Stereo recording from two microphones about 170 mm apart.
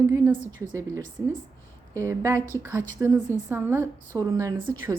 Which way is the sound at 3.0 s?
15° right (ahead or behind).